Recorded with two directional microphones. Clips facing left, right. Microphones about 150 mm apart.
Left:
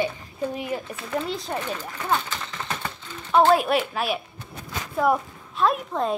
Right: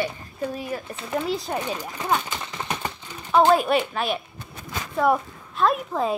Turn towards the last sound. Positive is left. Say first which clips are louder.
# right 1 dB
turn(degrees=0)  # may be behind; listen again after turning